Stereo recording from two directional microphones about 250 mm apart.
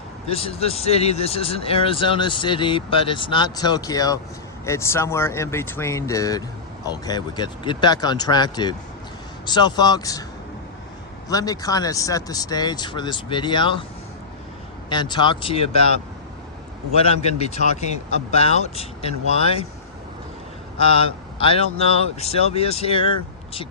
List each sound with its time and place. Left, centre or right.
0.3 s speech: left
11.3 s speech: centre
14.8 s speech: centre
16.9 s speech: left
20.7 s speech: left